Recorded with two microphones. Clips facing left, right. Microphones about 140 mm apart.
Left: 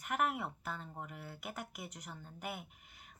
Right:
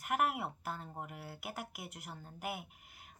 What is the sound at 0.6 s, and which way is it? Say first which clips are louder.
Speech: right 1 dB; 40° right (ahead or behind).